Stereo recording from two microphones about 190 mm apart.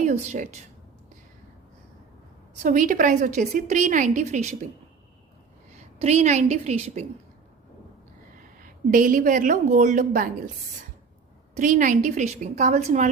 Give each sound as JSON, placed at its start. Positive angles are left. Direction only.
{"t": 0.0, "sound": "speech", "side_deg": -35}
{"t": 2.6, "sound": "a woman's voice", "side_deg": -45}
{"t": 5.7, "sound": "a woman's voice", "side_deg": -35}
{"t": 8.6, "sound": "a woman's voice", "side_deg": -45}
{"t": 11.5, "sound": "a woman's voice", "side_deg": -40}